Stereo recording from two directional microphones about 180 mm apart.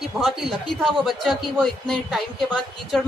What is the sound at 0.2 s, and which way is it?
A woman's voice, centre (ahead or behind).